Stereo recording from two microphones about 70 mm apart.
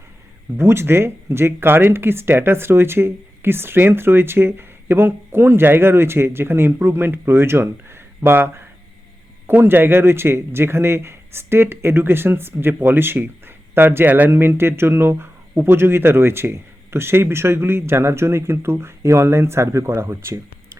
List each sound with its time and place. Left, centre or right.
0.5 s speech: right